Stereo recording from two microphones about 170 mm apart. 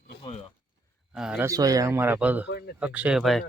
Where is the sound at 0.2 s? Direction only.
30° left (ahead or behind).